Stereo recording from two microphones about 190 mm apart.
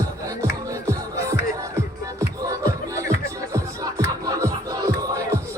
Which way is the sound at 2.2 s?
15° right (ahead or behind).